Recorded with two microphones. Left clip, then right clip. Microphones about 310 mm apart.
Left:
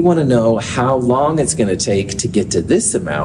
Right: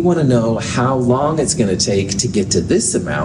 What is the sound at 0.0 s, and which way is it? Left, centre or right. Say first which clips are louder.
Speech: left 2 dB; left.